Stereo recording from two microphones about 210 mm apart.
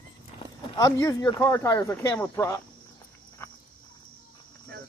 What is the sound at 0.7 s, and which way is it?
Speech, 15° left (ahead or behind).